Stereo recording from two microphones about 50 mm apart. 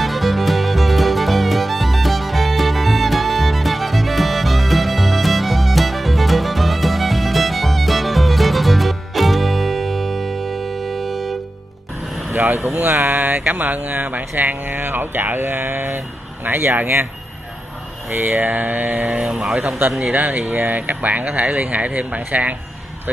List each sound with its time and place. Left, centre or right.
0.0 s music: centre
12.3 s vehicle: right
12.7 s speech: right
18.2 s speech: right